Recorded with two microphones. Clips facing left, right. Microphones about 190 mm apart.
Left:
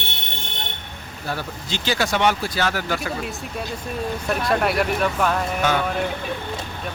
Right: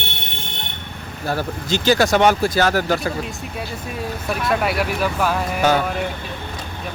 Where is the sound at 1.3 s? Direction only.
40° right (ahead or behind).